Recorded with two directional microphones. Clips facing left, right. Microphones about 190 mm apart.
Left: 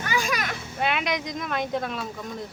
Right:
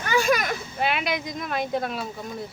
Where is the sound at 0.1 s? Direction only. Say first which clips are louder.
Right 7 dB; 45° right (ahead or behind).